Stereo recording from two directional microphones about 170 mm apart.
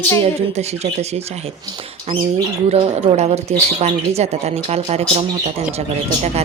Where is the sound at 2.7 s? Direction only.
40° right (ahead or behind).